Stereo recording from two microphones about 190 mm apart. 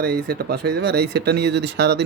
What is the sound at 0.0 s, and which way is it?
Speech, 55° right (ahead or behind).